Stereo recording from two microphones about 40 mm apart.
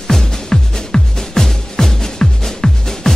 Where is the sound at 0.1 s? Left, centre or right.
Centre.